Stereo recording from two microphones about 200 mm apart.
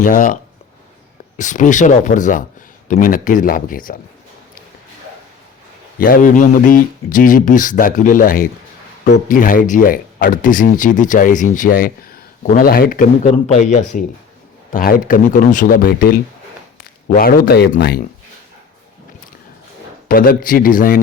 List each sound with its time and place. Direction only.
0.0 s speech: 40° left (ahead or behind)
1.4 s speech: 40° left (ahead or behind)
6.0 s speech: 45° left (ahead or behind)
17.2 s speech: 45° left (ahead or behind)
20.1 s speech: 45° left (ahead or behind)